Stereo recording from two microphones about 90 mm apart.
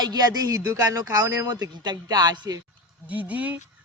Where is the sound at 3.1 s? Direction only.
15° right (ahead or behind).